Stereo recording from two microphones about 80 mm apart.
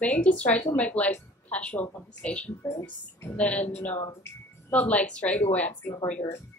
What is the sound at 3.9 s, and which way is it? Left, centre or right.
Speech, left.